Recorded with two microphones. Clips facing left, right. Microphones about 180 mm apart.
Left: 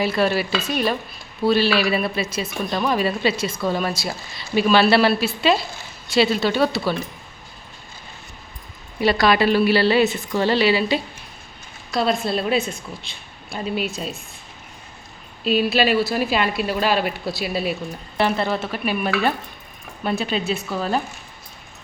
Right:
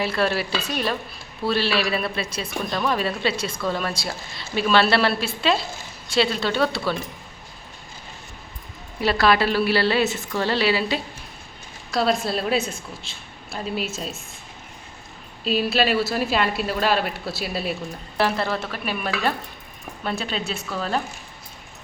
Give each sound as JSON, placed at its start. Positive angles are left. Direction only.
{"t": 0.0, "sound": "speech", "side_deg": 0}
{"t": 9.0, "sound": "speech", "side_deg": 0}
{"t": 15.4, "sound": "speech", "side_deg": 0}